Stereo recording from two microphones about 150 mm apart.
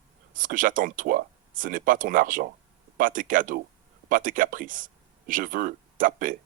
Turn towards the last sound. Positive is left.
turn(degrees=-65)  # may be behind; listen again after turning